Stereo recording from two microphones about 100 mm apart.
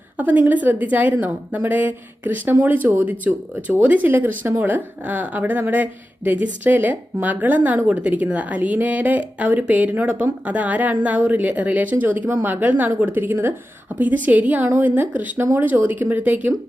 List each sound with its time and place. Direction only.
0.2 s a woman's voice: 15° right (ahead or behind)